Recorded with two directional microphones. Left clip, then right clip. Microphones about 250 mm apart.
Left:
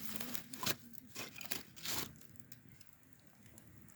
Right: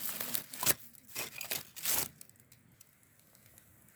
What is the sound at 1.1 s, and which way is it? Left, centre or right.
Sawing, right.